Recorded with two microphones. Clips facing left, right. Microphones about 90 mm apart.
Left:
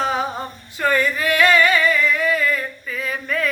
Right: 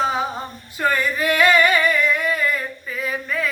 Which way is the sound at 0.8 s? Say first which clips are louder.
Even; 20° right (ahead or behind).